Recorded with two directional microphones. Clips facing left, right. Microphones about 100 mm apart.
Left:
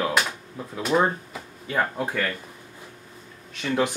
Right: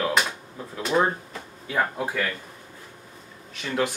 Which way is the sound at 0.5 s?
Centre (ahead or behind).